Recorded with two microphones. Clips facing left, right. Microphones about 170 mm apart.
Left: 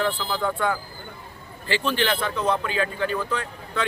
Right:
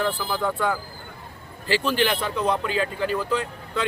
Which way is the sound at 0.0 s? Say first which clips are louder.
Even; 10° right (ahead or behind).